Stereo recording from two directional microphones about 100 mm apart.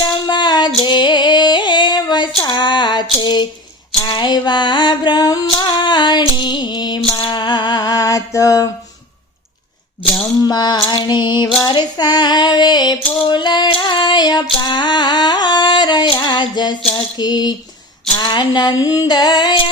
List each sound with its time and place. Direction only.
0.0 s female singing: 45° left (ahead or behind)
4.0 s a sound: 45° left (ahead or behind)
10.4 s female singing: 45° left (ahead or behind)